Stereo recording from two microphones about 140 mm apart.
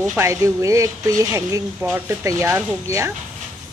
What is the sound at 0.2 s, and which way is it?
Speech, 20° right (ahead or behind).